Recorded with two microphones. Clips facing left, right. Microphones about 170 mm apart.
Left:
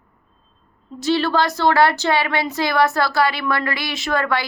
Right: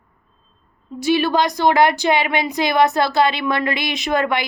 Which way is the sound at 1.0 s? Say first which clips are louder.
Right 1 dB; 15° right (ahead or behind).